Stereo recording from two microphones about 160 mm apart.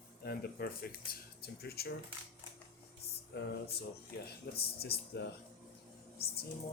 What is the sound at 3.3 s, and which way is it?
Speech, 90° left.